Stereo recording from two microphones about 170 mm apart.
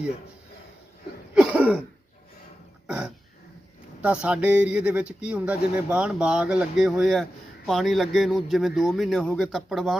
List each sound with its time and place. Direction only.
1.3 s cough: 5° right (ahead or behind)
2.8 s throat clearing: 5° right (ahead or behind)
4.0 s a man's voice: 5° right (ahead or behind)